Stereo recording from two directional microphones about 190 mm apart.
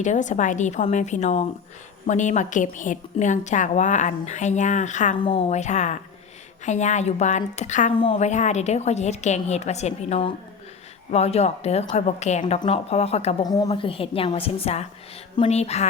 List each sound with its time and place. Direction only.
0.0 s a woman's voice: 40° left (ahead or behind)
5.2 s a woman's voice: 25° left (ahead or behind)
7.9 s a woman's voice: 30° left (ahead or behind)
13.4 s a woman's voice: 20° left (ahead or behind)